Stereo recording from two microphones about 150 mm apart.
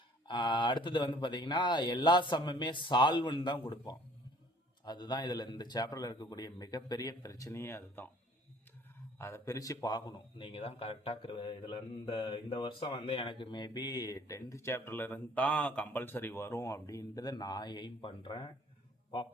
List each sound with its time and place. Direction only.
0.3 s speech: 30° left (ahead or behind)
4.9 s a man's voice: 30° left (ahead or behind)
9.1 s a man's voice: 15° left (ahead or behind)